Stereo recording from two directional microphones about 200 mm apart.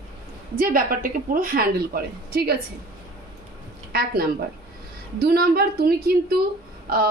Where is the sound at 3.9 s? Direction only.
50° right (ahead or behind).